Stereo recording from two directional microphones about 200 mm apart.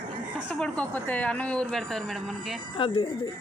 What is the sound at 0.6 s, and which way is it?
Speech, 5° left (ahead or behind).